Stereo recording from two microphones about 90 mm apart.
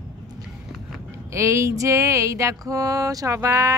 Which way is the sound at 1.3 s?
30° right (ahead or behind).